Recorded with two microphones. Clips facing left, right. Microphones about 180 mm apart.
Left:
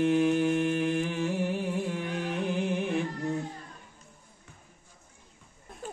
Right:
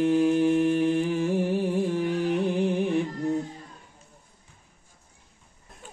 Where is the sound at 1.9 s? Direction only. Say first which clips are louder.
Right 7 dB; 35° right (ahead or behind).